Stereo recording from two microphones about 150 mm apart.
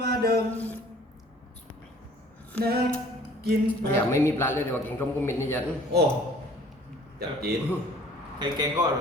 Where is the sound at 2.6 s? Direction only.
90° right.